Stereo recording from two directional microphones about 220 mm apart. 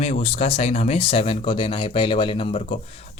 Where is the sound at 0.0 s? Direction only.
30° left (ahead or behind).